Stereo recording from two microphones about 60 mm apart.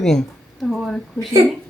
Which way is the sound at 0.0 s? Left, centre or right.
Centre.